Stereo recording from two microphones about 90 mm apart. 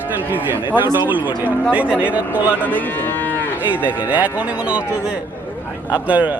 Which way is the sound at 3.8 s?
15° right (ahead or behind).